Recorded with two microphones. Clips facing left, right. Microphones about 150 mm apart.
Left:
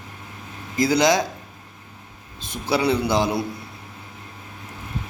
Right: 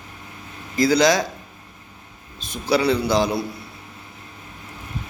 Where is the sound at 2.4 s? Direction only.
20° left (ahead or behind).